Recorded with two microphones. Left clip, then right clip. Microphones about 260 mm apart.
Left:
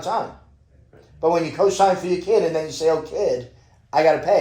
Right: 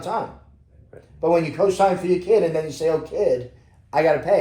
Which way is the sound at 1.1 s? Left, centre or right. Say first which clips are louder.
Even; centre.